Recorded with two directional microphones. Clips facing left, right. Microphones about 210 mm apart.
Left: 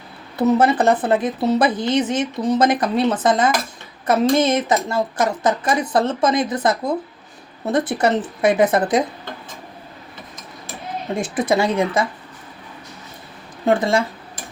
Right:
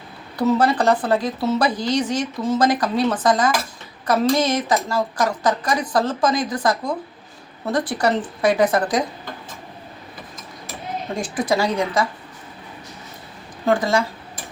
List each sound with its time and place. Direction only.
0.3 s speech: 20° left (ahead or behind)
11.1 s speech: 20° left (ahead or behind)
13.7 s speech: 25° left (ahead or behind)